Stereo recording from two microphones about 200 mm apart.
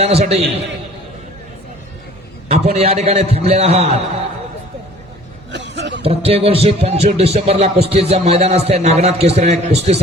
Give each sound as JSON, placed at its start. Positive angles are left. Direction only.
{"t": 0.0, "sound": "a man's voice", "side_deg": -30}
{"t": 2.5, "sound": "a man's voice", "side_deg": -30}
{"t": 5.5, "sound": "a sound", "side_deg": -60}
{"t": 6.0, "sound": "a man's voice", "side_deg": -30}